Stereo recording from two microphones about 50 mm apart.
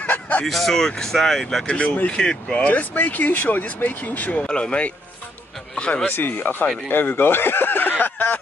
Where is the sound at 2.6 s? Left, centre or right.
Left.